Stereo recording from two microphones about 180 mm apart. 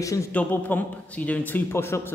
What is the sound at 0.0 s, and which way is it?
Speech, 20° left (ahead or behind).